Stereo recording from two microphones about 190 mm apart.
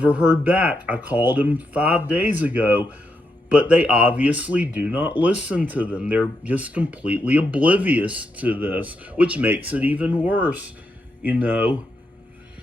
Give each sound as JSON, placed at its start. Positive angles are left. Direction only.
{"t": 0.0, "sound": "speech", "side_deg": -5}